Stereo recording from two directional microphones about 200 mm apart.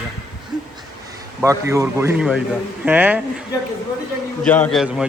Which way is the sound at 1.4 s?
15° right (ahead or behind).